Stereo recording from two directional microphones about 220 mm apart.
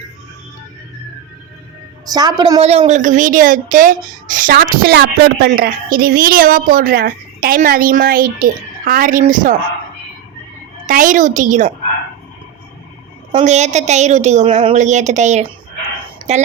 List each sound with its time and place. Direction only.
2.0 s a woman's voice: 20° right (ahead or behind); by 9.3 s 40° right (ahead or behind)
10.8 s a woman's voice: 35° right (ahead or behind)
13.3 s a woman's voice: 30° right (ahead or behind)
16.1 s a sound: 30° right (ahead or behind)